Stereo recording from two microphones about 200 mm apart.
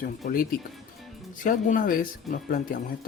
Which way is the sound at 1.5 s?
45° left (ahead or behind).